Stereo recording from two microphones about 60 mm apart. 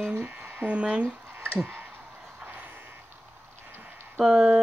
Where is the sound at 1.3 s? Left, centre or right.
Right.